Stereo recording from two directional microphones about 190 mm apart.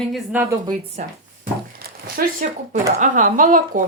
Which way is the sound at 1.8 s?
50° right (ahead or behind).